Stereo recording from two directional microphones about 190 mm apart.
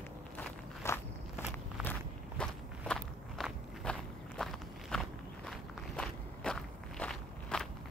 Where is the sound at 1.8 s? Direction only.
5° right (ahead or behind).